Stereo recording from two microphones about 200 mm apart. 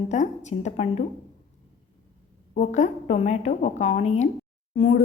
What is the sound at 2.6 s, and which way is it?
A woman's voice, 35° left (ahead or behind).